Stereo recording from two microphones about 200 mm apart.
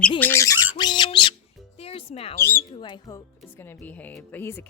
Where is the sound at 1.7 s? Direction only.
30° left (ahead or behind).